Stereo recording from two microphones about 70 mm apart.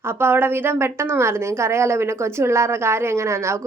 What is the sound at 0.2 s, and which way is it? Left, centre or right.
A woman's voice, right.